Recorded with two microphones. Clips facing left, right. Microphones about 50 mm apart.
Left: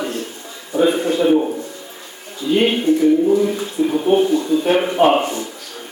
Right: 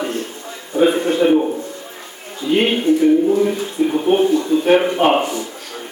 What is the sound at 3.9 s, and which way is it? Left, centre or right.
Speech, centre.